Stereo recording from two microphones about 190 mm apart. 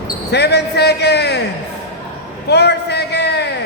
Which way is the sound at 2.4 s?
60° left (ahead or behind).